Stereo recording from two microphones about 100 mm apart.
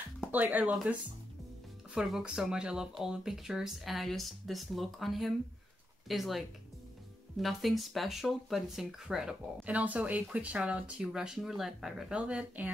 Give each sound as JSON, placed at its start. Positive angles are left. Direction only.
{"t": 0.3, "sound": "speech", "side_deg": -15}
{"t": 2.0, "sound": "speech", "side_deg": -5}